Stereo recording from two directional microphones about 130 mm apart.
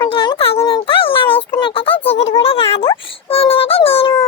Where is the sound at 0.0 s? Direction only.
40° left (ahead or behind).